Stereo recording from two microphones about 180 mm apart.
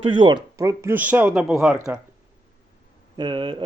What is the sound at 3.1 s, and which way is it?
Speech, 25° right (ahead or behind).